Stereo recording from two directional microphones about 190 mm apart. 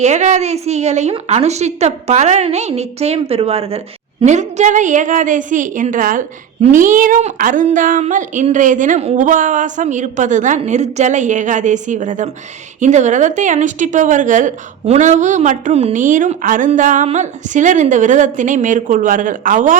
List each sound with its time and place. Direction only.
0.0 s a woman's voice: 40° right (ahead or behind)